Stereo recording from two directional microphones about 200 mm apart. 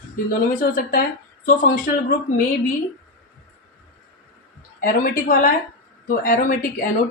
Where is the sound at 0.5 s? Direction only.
40° left (ahead or behind).